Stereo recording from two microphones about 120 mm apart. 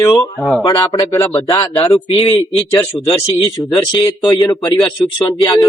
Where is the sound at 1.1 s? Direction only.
20° left (ahead or behind).